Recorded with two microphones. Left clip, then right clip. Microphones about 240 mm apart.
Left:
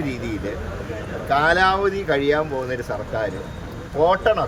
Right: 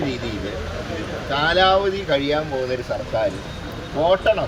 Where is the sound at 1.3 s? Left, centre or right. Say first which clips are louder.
Even; centre.